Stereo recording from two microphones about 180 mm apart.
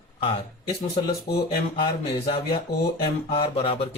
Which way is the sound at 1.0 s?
20° left (ahead or behind).